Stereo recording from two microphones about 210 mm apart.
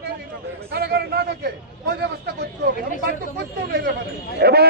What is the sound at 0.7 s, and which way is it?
A man's voice, 50° right (ahead or behind).